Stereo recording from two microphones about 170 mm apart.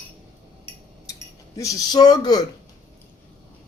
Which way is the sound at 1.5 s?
20° left (ahead or behind).